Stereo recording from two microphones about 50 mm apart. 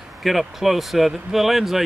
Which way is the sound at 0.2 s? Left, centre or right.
Centre.